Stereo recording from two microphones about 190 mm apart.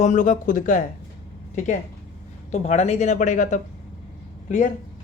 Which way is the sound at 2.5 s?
35° left (ahead or behind).